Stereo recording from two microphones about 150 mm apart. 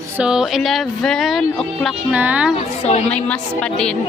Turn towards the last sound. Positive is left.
turn(degrees=5)  # may be behind; listen again after turning